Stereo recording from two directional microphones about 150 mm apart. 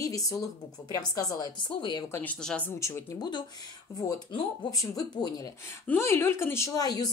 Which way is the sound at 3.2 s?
30° left (ahead or behind).